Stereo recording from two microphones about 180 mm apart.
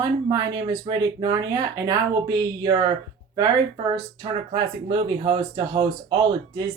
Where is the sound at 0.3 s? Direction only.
20° right (ahead or behind).